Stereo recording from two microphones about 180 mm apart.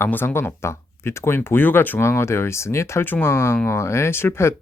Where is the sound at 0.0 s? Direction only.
10° left (ahead or behind).